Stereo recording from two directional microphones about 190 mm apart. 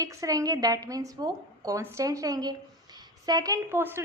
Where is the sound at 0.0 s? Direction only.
15° right (ahead or behind).